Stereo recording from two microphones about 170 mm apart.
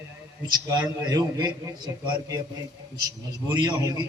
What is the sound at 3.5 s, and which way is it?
Speech, 20° right (ahead or behind).